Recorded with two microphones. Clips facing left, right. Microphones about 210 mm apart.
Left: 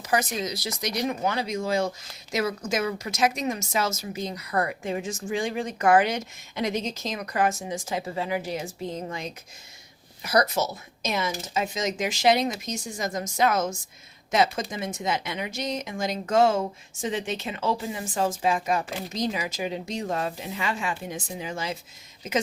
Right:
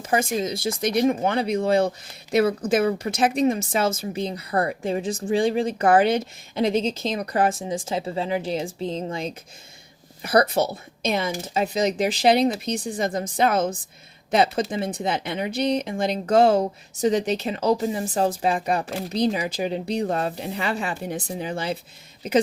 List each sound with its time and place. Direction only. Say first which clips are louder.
0.0 s speech: right 3 dB; 30° right (ahead or behind)
0.8 s speech: right 8 dB; 55° right (ahead or behind)
1.0 s speech: right 4 dB; 30° right (ahead or behind)